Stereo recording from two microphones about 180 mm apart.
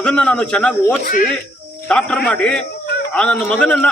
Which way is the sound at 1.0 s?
50° left (ahead or behind).